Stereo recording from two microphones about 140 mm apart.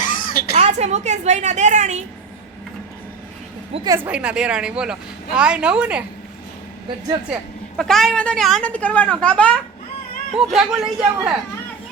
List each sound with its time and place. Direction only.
0.0 s a sound: 80° left
0.5 s a woman's voice: 50° right (ahead or behind)
3.8 s a woman's voice: 15° right (ahead or behind)
7.8 s speech: 5° left (ahead or behind)
10.3 s speech: 5° right (ahead or behind)